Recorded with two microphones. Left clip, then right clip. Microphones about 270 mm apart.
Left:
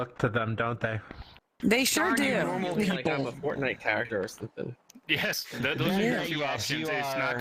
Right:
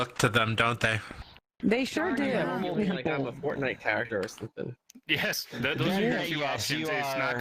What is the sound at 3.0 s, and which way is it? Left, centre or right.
Speech, centre.